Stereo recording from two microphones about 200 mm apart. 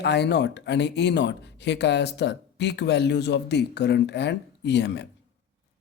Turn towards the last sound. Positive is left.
turn(degrees=60)  # may be behind; listen again after turning